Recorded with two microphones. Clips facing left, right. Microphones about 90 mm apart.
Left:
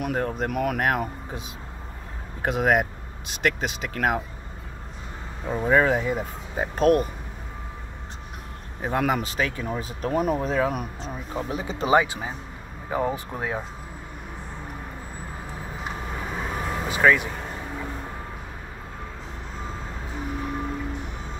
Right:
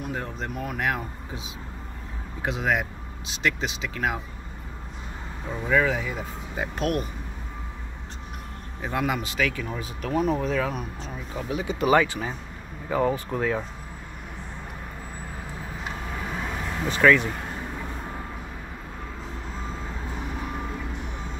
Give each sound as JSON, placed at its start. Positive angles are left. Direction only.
{"t": 0.1, "sound": "speech", "side_deg": 50}
{"t": 0.5, "sound": "speech", "side_deg": 65}
{"t": 2.4, "sound": "speech", "side_deg": 50}
{"t": 5.5, "sound": "speech", "side_deg": 45}
{"t": 8.8, "sound": "speech", "side_deg": 45}
{"t": 11.9, "sound": "speech", "side_deg": 20}
{"t": 16.9, "sound": "speech", "side_deg": 10}